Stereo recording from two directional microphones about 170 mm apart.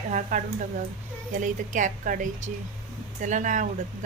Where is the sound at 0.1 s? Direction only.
45° right (ahead or behind).